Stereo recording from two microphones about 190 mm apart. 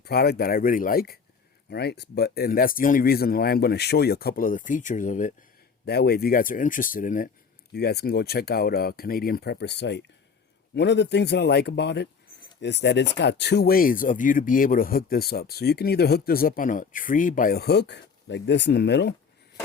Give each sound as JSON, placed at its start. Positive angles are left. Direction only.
{"t": 0.0, "sound": "speech", "side_deg": 55}
{"t": 5.8, "sound": "speech", "side_deg": 55}
{"t": 7.7, "sound": "speech", "side_deg": 60}